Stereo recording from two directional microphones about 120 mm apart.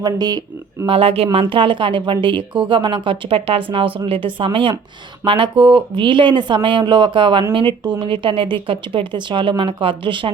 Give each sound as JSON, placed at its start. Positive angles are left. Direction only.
{"t": 0.0, "sound": "speech", "side_deg": -35}
{"t": 0.9, "sound": "speech", "side_deg": -50}